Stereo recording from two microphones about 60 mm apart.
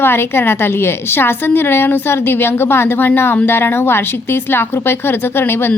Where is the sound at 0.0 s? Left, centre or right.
Left.